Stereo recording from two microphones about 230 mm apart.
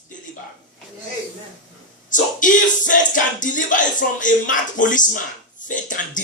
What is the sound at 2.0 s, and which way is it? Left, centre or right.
Music, left.